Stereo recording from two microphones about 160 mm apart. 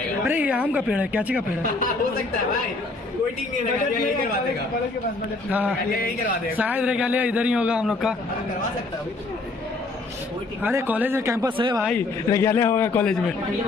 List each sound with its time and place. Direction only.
0.2 s speech: 10° right (ahead or behind)
5.5 s a man's voice: 10° right (ahead or behind)
5.9 s a man's voice: 65° left (ahead or behind)
6.5 s a man's voice: 10° right (ahead or behind)
10.6 s a man's voice: 15° right (ahead or behind)
11.5 s speech: 30° right (ahead or behind)
12.3 s a man's voice: 15° left (ahead or behind)